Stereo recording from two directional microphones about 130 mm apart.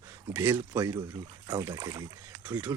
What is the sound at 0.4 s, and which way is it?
Speech, 25° right (ahead or behind).